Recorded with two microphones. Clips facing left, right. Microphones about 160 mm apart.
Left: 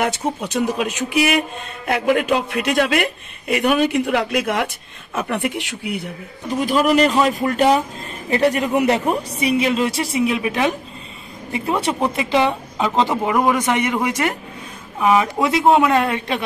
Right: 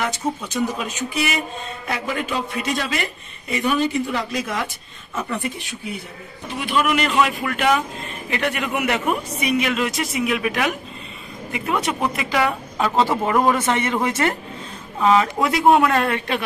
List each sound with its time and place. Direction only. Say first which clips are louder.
0.0 s a man's voice: left 3 dB; 65° left (ahead or behind)
6.5 s a man's voice: left 5 dB; 40° left (ahead or behind); by 16.4 s 20° left (ahead or behind)